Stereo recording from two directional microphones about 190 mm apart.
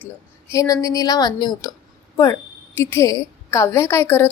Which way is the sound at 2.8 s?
15° left (ahead or behind).